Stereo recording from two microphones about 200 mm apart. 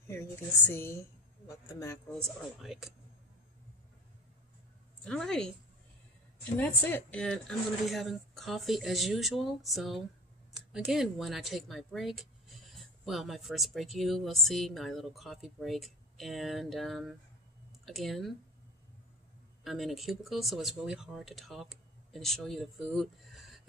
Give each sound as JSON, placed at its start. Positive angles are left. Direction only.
{"t": 0.1, "sound": "a woman's voice", "side_deg": 10}
{"t": 5.0, "sound": "speech", "side_deg": 5}
{"t": 6.6, "sound": "speech", "side_deg": 10}
{"t": 19.6, "sound": "speech", "side_deg": 0}